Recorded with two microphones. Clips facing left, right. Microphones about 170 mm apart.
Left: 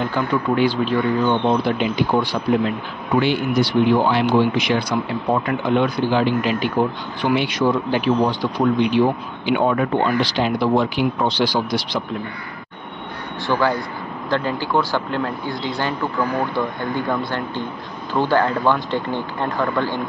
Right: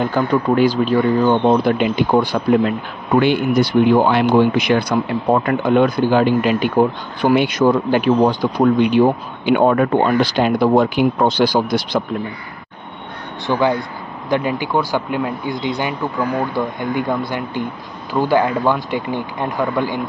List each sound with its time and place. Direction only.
0.6 s speech: 45° right (ahead or behind)
13.5 s speech: 20° right (ahead or behind)